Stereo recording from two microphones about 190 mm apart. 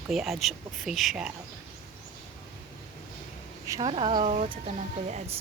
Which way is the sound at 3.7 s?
25° right (ahead or behind).